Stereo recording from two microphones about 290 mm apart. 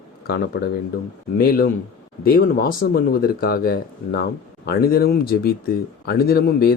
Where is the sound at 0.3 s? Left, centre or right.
Left.